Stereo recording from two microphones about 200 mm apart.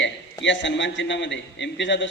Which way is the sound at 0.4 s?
65° left (ahead or behind).